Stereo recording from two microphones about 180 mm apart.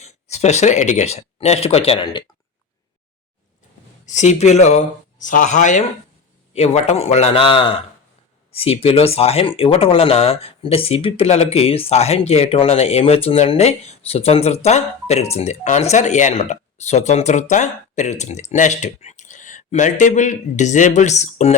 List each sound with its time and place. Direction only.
0.0 s speech: 40° left (ahead or behind)
4.0 s speech: 40° left (ahead or behind)